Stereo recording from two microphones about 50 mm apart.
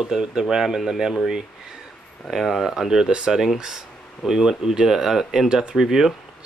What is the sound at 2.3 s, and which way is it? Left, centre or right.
Speech, centre.